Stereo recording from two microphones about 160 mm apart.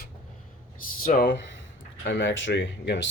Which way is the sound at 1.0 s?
70° left (ahead or behind).